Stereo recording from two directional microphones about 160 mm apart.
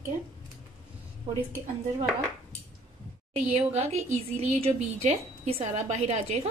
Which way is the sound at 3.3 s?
40° right (ahead or behind).